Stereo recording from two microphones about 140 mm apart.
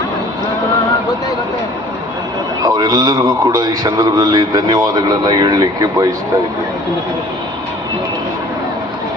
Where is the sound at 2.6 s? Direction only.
30° right (ahead or behind).